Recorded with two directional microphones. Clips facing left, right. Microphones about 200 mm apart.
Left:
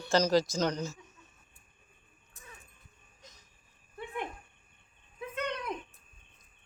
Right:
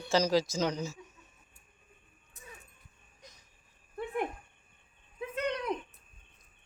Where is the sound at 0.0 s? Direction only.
5° right (ahead or behind).